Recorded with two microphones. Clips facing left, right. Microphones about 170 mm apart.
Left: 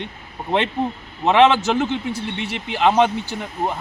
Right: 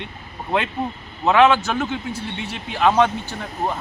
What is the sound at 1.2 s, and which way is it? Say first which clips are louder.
Speech: left 1 dB; 20° left (ahead or behind).